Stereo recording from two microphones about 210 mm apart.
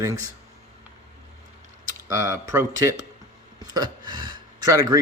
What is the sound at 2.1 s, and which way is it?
Speech, 15° right (ahead or behind).